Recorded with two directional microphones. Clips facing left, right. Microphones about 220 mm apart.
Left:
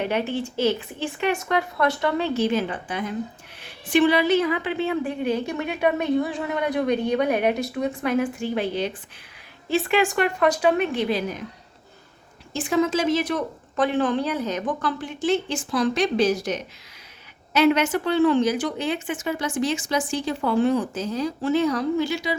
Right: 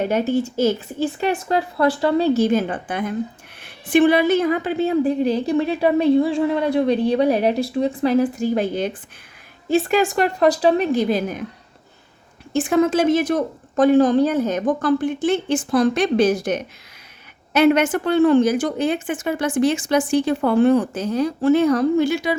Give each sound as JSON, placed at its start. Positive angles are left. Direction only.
{"t": 0.0, "sound": "a woman's voice", "side_deg": -45}
{"t": 12.5, "sound": "a woman's voice", "side_deg": -55}